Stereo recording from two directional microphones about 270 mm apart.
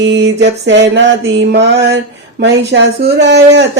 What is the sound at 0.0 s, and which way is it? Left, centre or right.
Speech, right.